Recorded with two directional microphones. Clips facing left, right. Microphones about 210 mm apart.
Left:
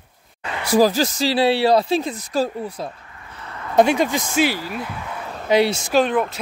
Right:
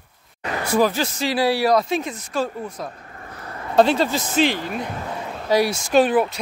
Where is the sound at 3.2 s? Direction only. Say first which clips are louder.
Right 1 dB; 40° right (ahead or behind).